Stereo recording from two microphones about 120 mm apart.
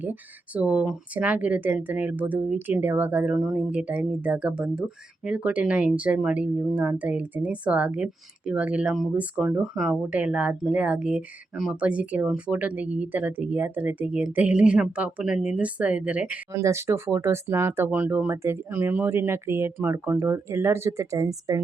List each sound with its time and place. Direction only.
0.0 s speech: 15° right (ahead or behind)
16.5 s speech: 25° right (ahead or behind)